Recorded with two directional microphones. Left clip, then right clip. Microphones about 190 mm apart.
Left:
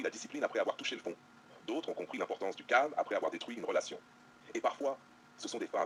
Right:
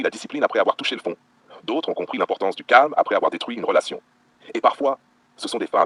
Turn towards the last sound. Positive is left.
turn(degrees=-45)  # may be behind; listen again after turning